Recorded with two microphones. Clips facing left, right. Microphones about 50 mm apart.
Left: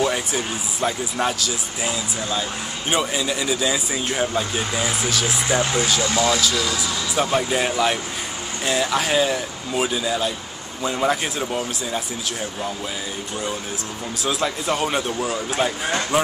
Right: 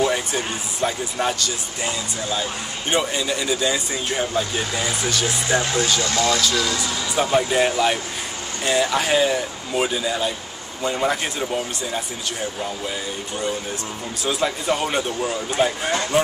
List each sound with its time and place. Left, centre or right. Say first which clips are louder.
0.0 s speech: right 1 dB; centre
5.6 s speech: left 1 dB; centre
14.2 s speech: right 1 dB; centre